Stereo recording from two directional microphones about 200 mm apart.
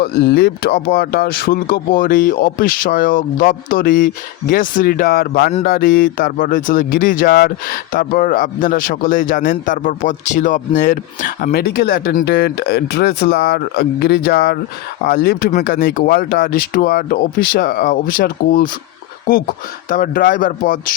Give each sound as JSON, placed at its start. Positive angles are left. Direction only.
{"t": 0.0, "sound": "speech", "side_deg": 50}
{"t": 19.9, "sound": "speech", "side_deg": 45}